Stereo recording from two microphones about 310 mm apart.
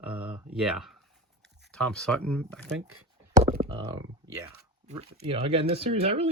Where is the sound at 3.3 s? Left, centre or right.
Right.